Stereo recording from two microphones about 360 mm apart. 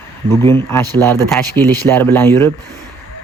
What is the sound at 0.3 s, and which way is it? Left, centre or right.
A man's voice, centre.